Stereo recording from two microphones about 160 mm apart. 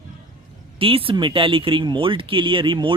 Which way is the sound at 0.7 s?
35° right (ahead or behind).